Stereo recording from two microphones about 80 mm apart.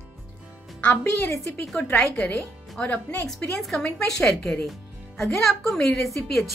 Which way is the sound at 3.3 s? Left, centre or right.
Centre.